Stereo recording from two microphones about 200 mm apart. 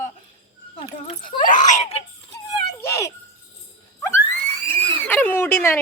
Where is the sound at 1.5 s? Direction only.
40° left (ahead or behind).